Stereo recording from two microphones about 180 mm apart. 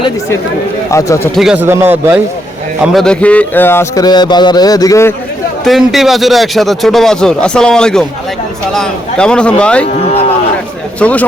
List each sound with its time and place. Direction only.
0.9 s a man's voice: 15° left (ahead or behind)
1.4 s a man's voice: 5° right (ahead or behind)
2.8 s a man's voice: centre (ahead or behind); by 5.1 s 15° left (ahead or behind)
5.6 s speech: centre (ahead or behind)
9.8 s speech: 35° left (ahead or behind)
11.0 s a man's voice: 10° left (ahead or behind)